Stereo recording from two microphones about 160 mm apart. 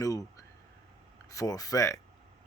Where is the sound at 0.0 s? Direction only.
20° left (ahead or behind).